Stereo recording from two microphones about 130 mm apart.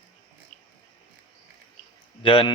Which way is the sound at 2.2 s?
45° left (ahead or behind).